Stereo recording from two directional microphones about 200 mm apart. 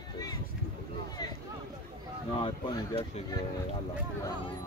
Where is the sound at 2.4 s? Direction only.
25° left (ahead or behind).